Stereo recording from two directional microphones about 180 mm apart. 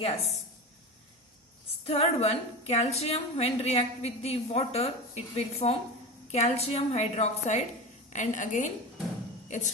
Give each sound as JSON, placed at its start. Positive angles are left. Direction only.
{"t": 1.8, "sound": "a woman's voice", "side_deg": 35}